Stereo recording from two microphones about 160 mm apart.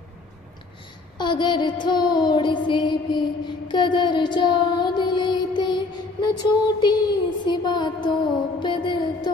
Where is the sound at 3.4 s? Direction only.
30° left (ahead or behind).